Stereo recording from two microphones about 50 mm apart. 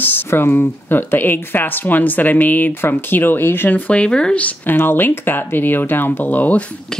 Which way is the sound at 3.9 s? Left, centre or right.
Left.